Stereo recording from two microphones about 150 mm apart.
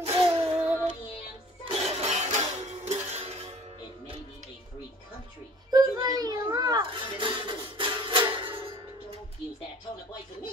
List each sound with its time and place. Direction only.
0.0 s music: 40° right (ahead or behind)
1.6 s music: 40° right (ahead or behind)
5.7 s music: 25° right (ahead or behind)